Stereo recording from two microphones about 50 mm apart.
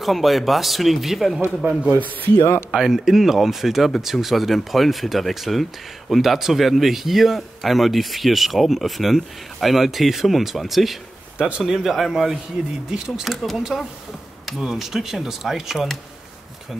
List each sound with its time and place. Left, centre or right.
0.0 s speech: centre
1.6 s a man's voice: right
2.7 s speech: centre
11.3 s speech: centre
11.8 s speech: centre
14.6 s speech: centre